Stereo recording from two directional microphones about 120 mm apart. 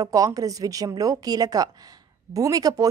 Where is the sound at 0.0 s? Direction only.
30° right (ahead or behind).